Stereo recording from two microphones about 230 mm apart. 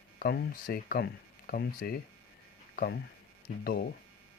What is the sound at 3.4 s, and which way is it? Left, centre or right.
Speech, left.